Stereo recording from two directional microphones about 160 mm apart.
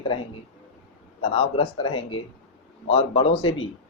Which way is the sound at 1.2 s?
35° left (ahead or behind).